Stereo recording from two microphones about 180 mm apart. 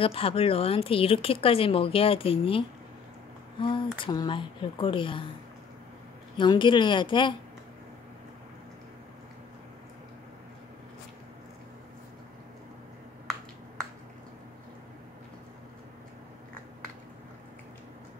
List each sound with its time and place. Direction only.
0.0 s speech: 30° left (ahead or behind)
6.3 s speech: 25° left (ahead or behind)